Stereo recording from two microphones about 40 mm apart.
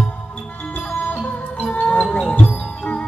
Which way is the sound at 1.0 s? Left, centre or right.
Left.